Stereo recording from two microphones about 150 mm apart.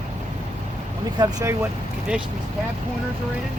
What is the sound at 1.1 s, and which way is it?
Speech, 20° right (ahead or behind).